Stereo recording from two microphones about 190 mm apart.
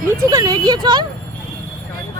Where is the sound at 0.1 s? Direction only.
20° right (ahead or behind).